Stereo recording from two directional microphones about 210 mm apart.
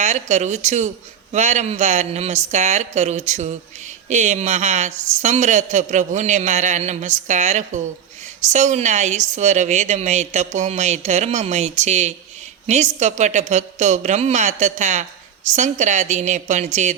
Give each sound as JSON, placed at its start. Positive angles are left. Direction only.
{"t": 0.0, "sound": "speech", "side_deg": -35}